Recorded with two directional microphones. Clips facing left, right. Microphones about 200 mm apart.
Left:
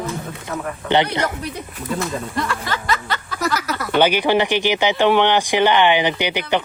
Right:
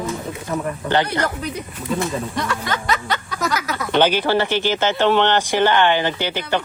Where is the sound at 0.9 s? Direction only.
20° left (ahead or behind).